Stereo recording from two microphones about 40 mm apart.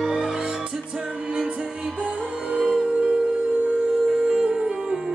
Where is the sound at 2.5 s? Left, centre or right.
Right.